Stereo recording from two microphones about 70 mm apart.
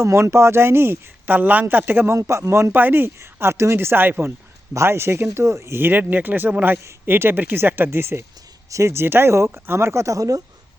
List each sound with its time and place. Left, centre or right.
0.0 s speech: right
1.3 s speech: right
2.1 s speech: right
2.7 s speech: right